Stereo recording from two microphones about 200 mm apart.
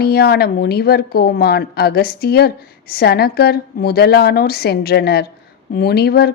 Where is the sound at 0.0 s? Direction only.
50° left (ahead or behind).